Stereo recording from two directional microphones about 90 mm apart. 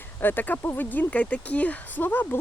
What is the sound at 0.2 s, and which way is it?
Speech, 20° left (ahead or behind).